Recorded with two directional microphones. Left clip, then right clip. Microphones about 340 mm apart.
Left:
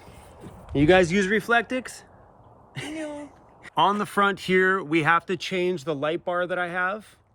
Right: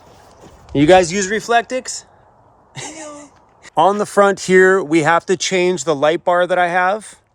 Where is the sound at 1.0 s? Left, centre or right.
Centre.